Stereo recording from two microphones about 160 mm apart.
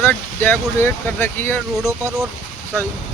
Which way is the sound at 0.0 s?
10° left (ahead or behind).